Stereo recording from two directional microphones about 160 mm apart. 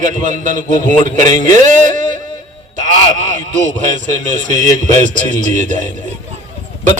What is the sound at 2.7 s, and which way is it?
A man's voice, 50° right (ahead or behind).